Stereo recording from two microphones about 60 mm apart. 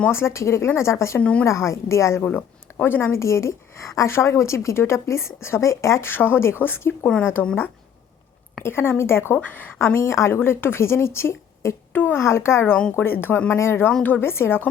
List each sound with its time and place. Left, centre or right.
0.1 s a woman's voice: left
1.2 s speech: left
1.5 s speech: left
2.2 s speech: left
3.2 s a woman's voice: left
6.1 s speech: left
8.6 s a woman's voice: left
9.4 s a woman's voice: left
11.9 s a woman's voice: left